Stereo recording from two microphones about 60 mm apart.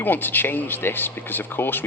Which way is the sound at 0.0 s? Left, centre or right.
Left.